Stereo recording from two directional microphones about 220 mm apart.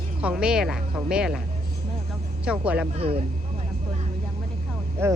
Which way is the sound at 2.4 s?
5° right (ahead or behind).